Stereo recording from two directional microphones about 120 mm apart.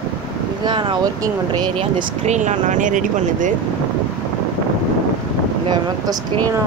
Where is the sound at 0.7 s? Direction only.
40° right (ahead or behind).